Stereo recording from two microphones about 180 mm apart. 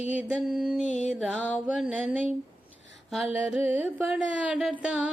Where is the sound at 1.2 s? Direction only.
Centre (ahead or behind).